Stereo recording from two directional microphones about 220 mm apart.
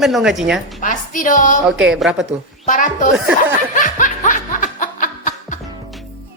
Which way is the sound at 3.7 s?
35° left (ahead or behind).